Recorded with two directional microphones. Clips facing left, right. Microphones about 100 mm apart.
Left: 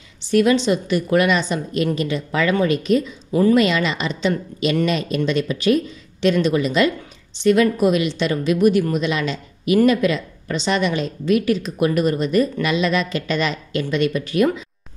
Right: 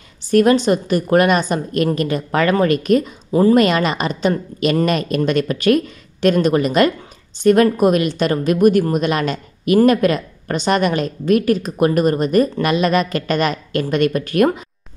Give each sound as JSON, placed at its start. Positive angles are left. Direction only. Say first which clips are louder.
{"t": 0.2, "sound": "a woman's voice", "louder": "right 3 dB", "side_deg": -45}
{"t": 3.3, "sound": "a woman's voice", "louder": "right 3 dB", "side_deg": -35}
{"t": 3.5, "sound": "a woman's voice", "louder": "right 3 dB", "side_deg": -50}